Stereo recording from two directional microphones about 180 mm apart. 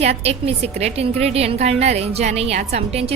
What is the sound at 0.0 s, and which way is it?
A woman's voice, 35° right (ahead or behind).